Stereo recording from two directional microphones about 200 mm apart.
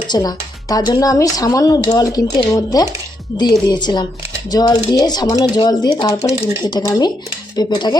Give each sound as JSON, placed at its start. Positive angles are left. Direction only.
{"t": 0.1, "sound": "speech", "side_deg": 20}